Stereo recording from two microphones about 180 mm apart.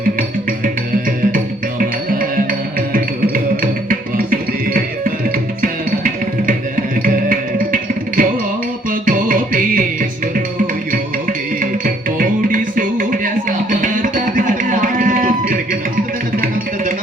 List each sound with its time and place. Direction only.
1.8 s music: 50° right (ahead or behind)